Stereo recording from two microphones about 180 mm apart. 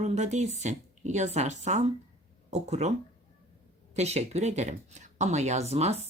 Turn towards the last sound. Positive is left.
turn(degrees=-35)  # may be behind; listen again after turning